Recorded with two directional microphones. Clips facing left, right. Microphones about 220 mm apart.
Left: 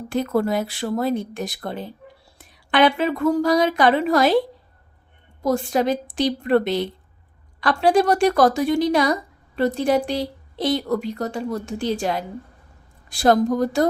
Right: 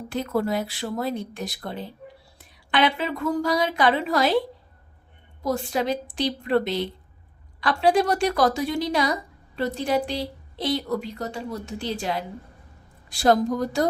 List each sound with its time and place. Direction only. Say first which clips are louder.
0.1 s speech: left 4 dB; 50° left (ahead or behind)
5.4 s speech: left 5 dB; 50° left (ahead or behind)
11.2 s speech: left 5 dB; 50° left (ahead or behind)